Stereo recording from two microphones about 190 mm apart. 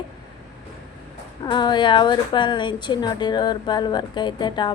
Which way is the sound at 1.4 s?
25° left (ahead or behind).